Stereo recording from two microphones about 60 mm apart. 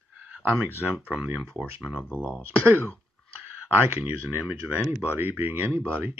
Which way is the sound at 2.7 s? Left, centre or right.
Left.